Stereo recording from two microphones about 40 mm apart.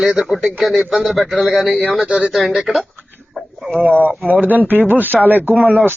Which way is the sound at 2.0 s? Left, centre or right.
Right.